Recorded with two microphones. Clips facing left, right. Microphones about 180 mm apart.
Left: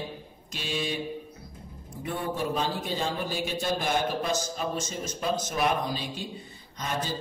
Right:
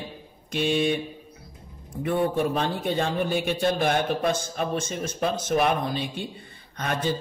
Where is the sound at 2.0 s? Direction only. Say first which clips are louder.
Right 7 dB; 55° right (ahead or behind).